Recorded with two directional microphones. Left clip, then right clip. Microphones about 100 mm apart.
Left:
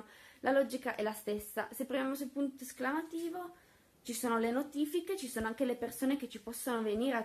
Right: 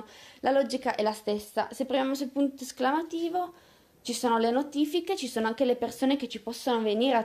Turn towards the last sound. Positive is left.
turn(degrees=-5)  # may be behind; listen again after turning